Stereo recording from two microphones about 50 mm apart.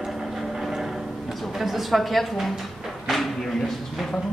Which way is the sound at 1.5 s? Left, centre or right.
Centre.